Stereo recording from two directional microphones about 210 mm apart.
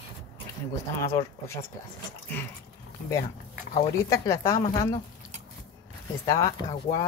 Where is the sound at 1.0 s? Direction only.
15° left (ahead or behind).